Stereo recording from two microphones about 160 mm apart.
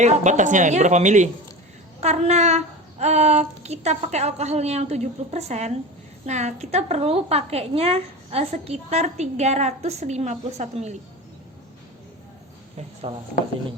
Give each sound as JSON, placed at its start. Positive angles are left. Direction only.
{"t": 0.0, "sound": "a woman's voice", "side_deg": -50}
{"t": 13.0, "sound": "speech", "side_deg": -30}